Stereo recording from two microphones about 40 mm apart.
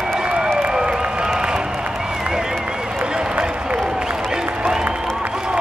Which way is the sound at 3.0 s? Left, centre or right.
Right.